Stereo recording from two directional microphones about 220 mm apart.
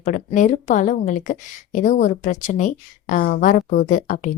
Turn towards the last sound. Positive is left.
turn(degrees=35)  # may be behind; listen again after turning